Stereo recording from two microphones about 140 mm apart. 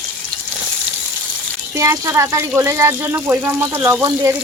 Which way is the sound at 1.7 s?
20° right (ahead or behind).